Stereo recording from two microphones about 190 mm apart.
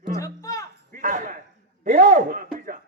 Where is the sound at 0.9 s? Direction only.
45° right (ahead or behind).